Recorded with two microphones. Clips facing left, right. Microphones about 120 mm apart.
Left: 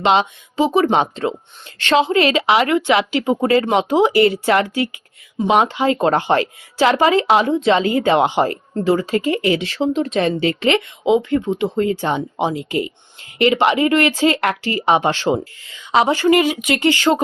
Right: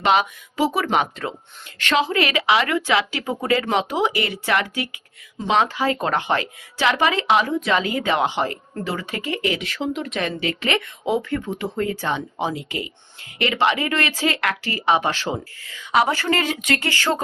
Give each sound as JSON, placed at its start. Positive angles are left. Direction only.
{"t": 0.0, "sound": "a woman's voice", "side_deg": 25}